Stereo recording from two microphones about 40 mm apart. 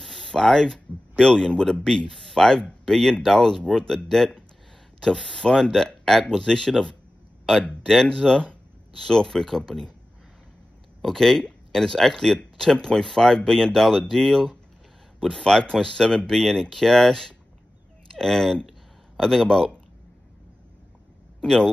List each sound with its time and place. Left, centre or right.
0.0 s a sound: centre
1.1 s speech: centre
11.0 s speech: centre
21.4 s speech: centre